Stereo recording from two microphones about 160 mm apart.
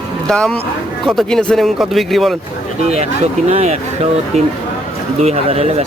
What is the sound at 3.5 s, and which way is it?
Speech, 40° right (ahead or behind).